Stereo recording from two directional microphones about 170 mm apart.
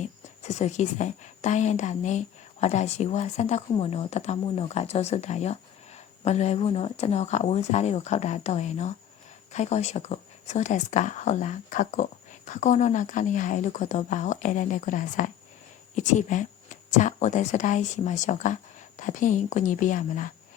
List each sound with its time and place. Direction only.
0.0 s speech: 40° left (ahead or behind)